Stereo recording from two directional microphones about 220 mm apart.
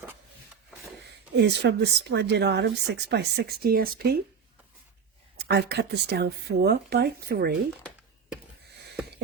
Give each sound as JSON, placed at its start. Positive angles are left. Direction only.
{"t": 1.4, "sound": "speech", "side_deg": -50}
{"t": 5.4, "sound": "speech", "side_deg": -50}